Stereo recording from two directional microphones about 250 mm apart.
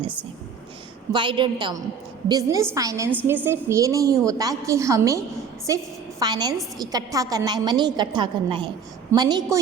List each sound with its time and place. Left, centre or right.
1.1 s a woman's voice: centre